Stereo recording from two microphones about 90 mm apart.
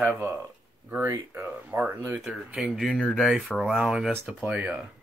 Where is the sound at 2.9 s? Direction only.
5° left (ahead or behind).